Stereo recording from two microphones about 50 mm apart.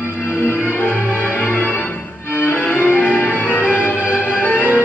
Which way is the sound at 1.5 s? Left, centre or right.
Left.